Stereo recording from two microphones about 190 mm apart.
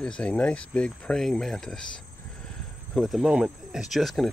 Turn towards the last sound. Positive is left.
turn(degrees=0)  # may be behind; listen again after turning